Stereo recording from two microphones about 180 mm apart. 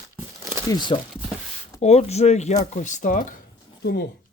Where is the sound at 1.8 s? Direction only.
35° left (ahead or behind).